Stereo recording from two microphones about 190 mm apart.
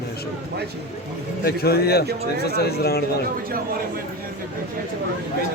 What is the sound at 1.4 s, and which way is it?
Speech, 55° left (ahead or behind).